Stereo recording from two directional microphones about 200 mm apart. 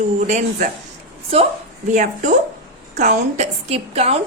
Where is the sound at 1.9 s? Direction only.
40° right (ahead or behind).